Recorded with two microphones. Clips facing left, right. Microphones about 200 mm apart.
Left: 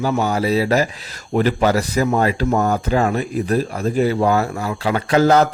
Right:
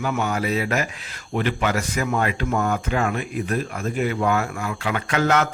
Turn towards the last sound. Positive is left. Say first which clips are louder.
# left 7 dB
turn(degrees=35)  # may be behind; listen again after turning